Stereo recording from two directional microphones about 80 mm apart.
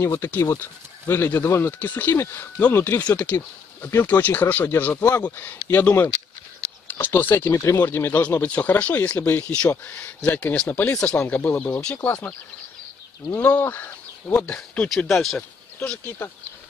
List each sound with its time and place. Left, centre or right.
0.0 s speech: left; by 16.0 s centre